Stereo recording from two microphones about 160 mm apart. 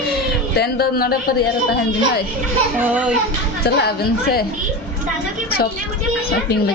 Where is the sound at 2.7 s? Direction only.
10° right (ahead or behind).